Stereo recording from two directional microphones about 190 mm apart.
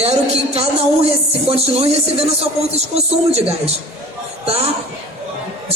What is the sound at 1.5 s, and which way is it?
A man's voice, 30° right (ahead or behind).